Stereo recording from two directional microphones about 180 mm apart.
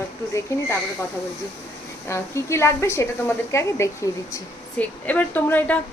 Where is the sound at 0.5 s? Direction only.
15° left (ahead or behind).